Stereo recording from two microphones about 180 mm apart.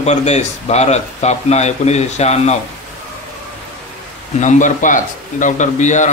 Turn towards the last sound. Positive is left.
turn(degrees=40)  # may be behind; listen again after turning